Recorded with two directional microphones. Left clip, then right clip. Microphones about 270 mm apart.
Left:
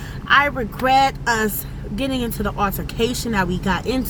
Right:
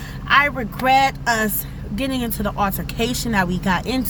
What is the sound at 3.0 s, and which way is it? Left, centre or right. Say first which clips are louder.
Speech: left 2 dB; right.